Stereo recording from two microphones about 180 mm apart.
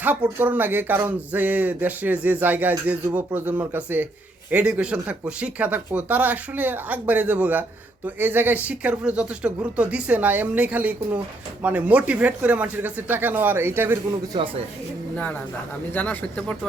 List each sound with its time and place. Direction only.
0.0 s speech: 10° right (ahead or behind)
14.3 s speech: 25° right (ahead or behind)
15.1 s speech: 10° left (ahead or behind)